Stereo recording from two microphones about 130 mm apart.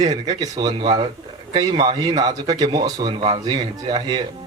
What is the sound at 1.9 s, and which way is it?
Speech, 30° right (ahead or behind).